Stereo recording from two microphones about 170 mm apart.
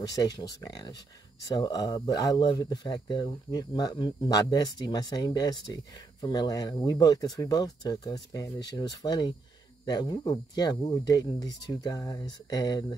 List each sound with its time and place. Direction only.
0.1 s speech: 20° left (ahead or behind)